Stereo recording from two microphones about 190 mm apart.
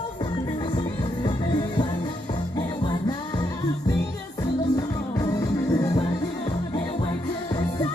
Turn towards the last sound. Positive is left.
turn(degrees=20)  # may be behind; listen again after turning